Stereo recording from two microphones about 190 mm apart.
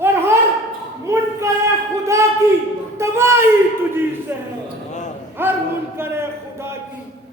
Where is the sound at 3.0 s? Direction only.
15° right (ahead or behind).